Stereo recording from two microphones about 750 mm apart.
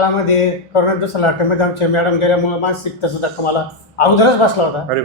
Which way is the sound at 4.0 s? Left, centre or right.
Left.